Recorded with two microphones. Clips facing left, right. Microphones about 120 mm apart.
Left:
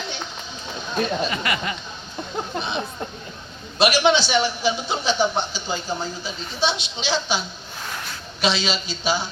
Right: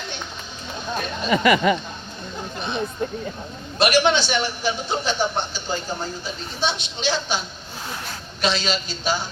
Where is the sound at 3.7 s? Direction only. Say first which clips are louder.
Even; 50° right (ahead or behind).